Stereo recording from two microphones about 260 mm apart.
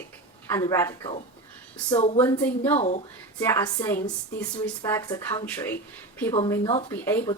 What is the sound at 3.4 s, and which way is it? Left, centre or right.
A woman's voice, centre.